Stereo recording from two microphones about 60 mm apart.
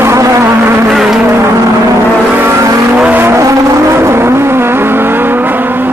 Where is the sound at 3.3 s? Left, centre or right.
Right.